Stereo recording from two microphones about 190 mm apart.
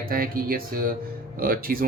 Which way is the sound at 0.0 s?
50° right (ahead or behind).